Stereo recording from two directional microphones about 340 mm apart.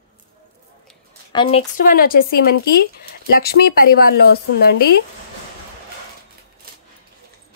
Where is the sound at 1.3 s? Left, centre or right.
Centre.